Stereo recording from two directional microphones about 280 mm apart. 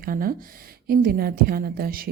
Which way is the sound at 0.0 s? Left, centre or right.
Right.